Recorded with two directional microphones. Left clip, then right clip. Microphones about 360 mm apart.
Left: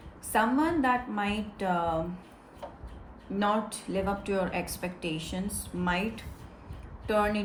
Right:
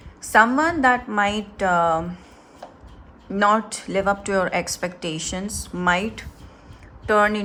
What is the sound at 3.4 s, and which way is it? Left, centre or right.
Speech, right.